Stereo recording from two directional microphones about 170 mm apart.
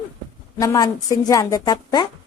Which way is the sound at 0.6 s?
20° left (ahead or behind).